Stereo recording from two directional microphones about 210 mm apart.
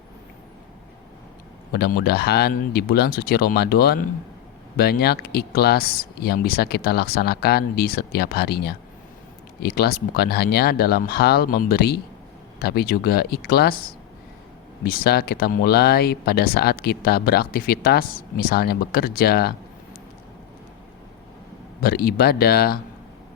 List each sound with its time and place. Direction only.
1.7 s speech: 50° left (ahead or behind)
21.8 s speech: 45° left (ahead or behind)